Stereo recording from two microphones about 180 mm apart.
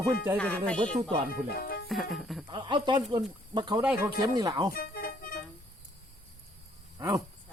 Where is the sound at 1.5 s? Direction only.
60° left (ahead or behind).